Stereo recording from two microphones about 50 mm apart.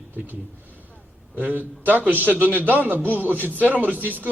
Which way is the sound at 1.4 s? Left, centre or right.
Right.